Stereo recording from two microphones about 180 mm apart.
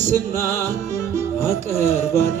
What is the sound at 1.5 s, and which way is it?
Music, 15° left (ahead or behind).